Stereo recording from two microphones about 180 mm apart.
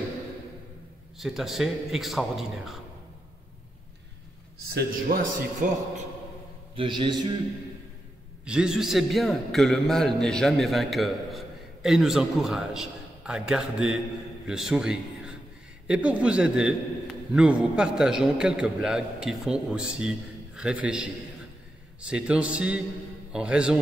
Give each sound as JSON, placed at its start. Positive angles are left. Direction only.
{"t": 1.1, "sound": "a man's voice", "side_deg": 0}
{"t": 4.7, "sound": "speech", "side_deg": -55}
{"t": 6.7, "sound": "a man's voice", "side_deg": -30}
{"t": 8.5, "sound": "a man's voice", "side_deg": -5}